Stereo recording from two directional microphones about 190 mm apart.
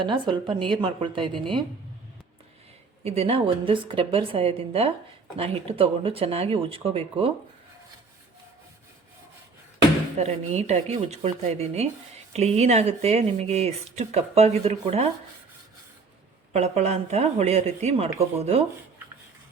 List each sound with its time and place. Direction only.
0.0 s speech: 25° right (ahead or behind)
3.0 s speech: 35° right (ahead or behind)
10.2 s speech: 35° right (ahead or behind)
16.5 s speech: 35° right (ahead or behind)